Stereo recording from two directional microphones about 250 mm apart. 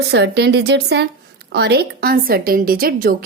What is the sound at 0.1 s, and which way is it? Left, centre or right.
A woman's voice, right.